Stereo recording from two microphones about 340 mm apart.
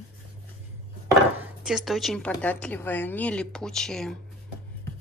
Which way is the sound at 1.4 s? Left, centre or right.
Centre.